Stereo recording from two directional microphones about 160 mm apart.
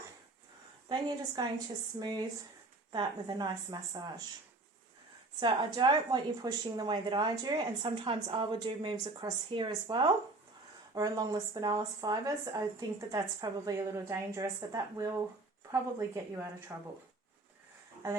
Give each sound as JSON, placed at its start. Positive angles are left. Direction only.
{"t": 0.9, "sound": "speech", "side_deg": -25}
{"t": 5.4, "sound": "a woman's voice", "side_deg": -30}